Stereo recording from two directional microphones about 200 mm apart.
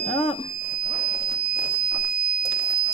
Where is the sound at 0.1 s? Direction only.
30° left (ahead or behind).